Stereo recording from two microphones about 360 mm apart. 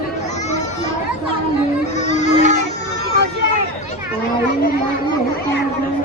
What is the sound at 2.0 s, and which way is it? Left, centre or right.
Music, centre.